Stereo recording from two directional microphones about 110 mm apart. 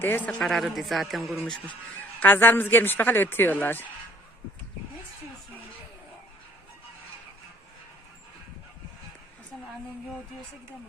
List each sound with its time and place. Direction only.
0.0 s speech: 20° left (ahead or behind)
0.3 s a woman's voice: 5° left (ahead or behind)
2.2 s speech: 15° left (ahead or behind)